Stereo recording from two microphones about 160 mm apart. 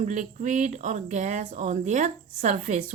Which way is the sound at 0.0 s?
50° right (ahead or behind).